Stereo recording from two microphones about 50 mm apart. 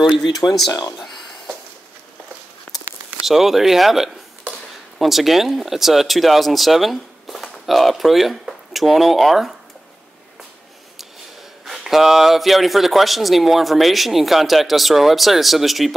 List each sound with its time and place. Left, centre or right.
0.0 s speech: centre
2.7 s a sound: left
3.2 s speech: centre
11.6 s speech: centre